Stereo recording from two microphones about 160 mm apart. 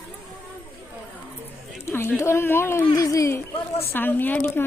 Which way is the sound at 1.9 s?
15° left (ahead or behind).